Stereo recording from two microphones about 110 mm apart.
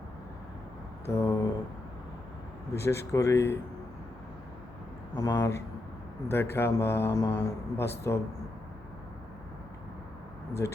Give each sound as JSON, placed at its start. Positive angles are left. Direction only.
{"t": 1.0, "sound": "a sound", "side_deg": 30}
{"t": 2.7, "sound": "speech", "side_deg": 25}
{"t": 5.1, "sound": "speech", "side_deg": 35}
{"t": 10.6, "sound": "speech", "side_deg": 25}